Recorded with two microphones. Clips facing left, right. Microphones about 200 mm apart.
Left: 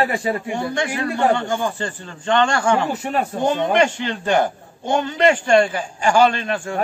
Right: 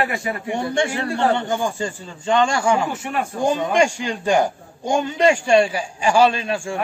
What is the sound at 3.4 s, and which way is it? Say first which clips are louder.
A man's voice: even; 10° right (ahead or behind).